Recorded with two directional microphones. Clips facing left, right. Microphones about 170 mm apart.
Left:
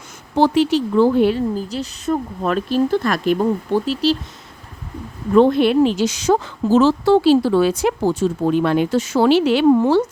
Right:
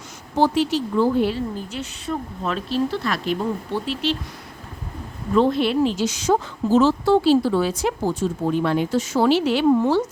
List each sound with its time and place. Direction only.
0.3 s a woman's voice: 70° left (ahead or behind)
1.5 s a woman's voice: 35° left (ahead or behind)
2.4 s speech: 50° left (ahead or behind)
5.3 s a woman's voice: 55° left (ahead or behind); by 10.0 s 75° left (ahead or behind)